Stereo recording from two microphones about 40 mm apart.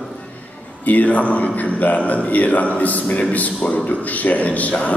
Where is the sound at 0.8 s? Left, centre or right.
Left.